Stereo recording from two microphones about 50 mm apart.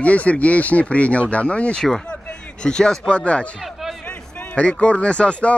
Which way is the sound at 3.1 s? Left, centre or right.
Left.